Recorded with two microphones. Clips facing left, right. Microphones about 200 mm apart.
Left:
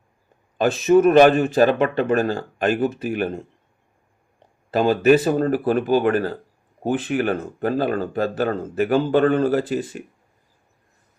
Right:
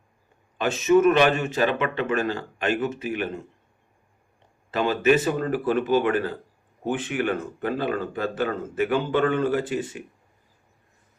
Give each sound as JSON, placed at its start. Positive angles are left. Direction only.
{"t": 0.6, "sound": "speech", "side_deg": 35}
{"t": 4.7, "sound": "speech", "side_deg": 35}